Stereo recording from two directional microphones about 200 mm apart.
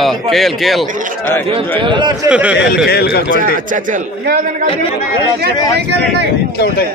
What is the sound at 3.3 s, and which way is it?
A man's voice, 40° right (ahead or behind).